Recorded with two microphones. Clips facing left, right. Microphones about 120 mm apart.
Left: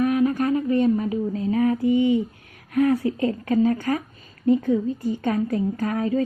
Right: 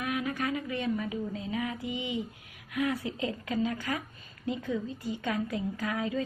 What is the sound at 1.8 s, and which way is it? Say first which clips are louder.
Mantra: left 16 dB; 15° right (ahead or behind).